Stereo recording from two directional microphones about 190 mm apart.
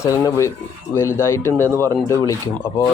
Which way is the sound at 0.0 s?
15° left (ahead or behind).